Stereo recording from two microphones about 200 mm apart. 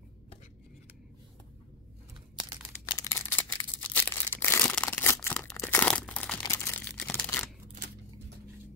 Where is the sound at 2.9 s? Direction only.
15° left (ahead or behind).